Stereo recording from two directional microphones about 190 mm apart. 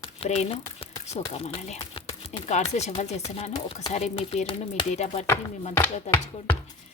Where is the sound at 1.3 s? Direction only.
35° left (ahead or behind).